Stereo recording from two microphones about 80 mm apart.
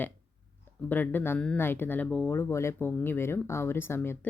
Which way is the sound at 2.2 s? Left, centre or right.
Left.